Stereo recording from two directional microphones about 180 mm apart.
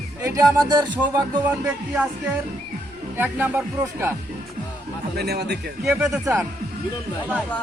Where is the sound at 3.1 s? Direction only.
10° right (ahead or behind).